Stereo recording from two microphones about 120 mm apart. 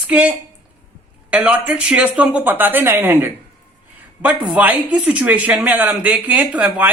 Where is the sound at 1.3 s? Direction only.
15° right (ahead or behind).